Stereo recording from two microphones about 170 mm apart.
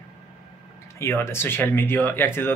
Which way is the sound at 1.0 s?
15° left (ahead or behind).